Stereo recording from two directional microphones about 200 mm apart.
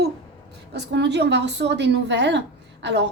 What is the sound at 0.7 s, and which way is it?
A woman's voice, 60° right (ahead or behind).